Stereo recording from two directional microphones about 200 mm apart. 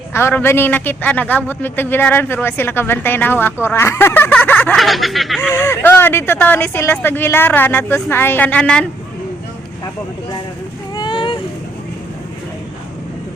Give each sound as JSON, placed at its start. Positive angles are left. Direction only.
{"t": 0.1, "sound": "a man's voice", "side_deg": 10}
{"t": 5.4, "sound": "a man's voice", "side_deg": 15}
{"t": 10.9, "sound": "vehicle", "side_deg": 25}